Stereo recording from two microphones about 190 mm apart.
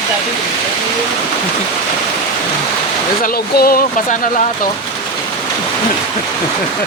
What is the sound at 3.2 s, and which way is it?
Speech, 50° left (ahead or behind).